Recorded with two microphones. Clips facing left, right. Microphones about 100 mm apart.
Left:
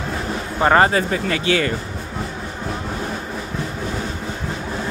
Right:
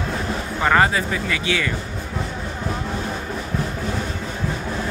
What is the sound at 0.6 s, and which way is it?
Speech, 35° left (ahead or behind).